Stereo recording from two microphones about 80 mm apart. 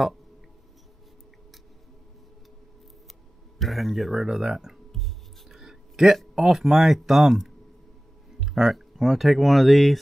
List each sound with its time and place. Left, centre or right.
3.5 s speech: centre